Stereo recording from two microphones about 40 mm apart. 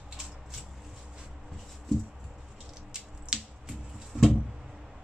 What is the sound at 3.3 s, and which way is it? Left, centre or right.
Squish, centre.